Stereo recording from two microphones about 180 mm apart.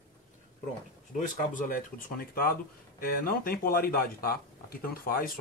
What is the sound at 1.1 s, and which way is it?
Speech, 45° left (ahead or behind).